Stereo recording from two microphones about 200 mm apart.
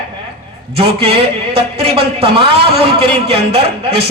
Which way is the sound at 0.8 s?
30° right (ahead or behind).